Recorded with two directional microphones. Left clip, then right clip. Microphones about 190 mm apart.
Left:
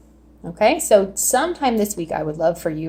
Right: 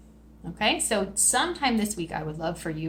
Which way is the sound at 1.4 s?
35° left (ahead or behind).